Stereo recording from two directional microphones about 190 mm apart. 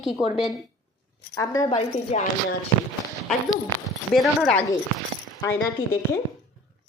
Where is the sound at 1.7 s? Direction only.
35° left (ahead or behind).